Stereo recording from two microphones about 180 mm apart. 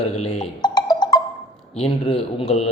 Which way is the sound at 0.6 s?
20° left (ahead or behind).